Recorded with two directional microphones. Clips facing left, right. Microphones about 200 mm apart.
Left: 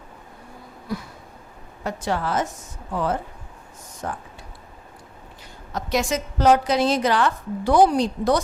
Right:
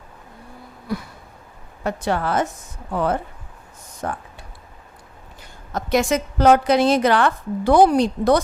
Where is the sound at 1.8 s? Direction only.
60° right (ahead or behind).